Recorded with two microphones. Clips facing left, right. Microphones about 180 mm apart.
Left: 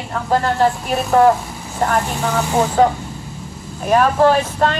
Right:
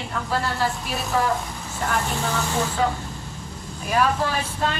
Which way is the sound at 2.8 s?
50° left (ahead or behind).